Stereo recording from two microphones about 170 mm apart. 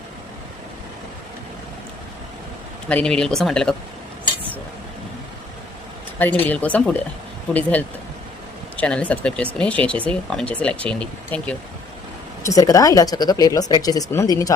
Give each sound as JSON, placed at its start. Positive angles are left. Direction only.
{"t": 2.9, "sound": "speech", "side_deg": 5}
{"t": 6.1, "sound": "speech", "side_deg": 10}
{"t": 12.4, "sound": "speech", "side_deg": 20}